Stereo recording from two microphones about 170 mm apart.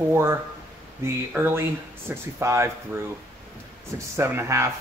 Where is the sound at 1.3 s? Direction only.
15° right (ahead or behind).